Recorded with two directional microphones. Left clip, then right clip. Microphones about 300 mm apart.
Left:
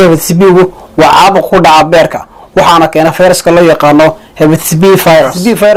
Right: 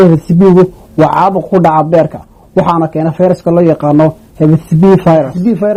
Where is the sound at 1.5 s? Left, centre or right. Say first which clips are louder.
Left 3 dB; centre.